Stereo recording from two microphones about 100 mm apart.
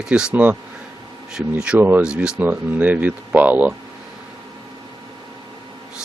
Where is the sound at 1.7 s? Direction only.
20° right (ahead or behind).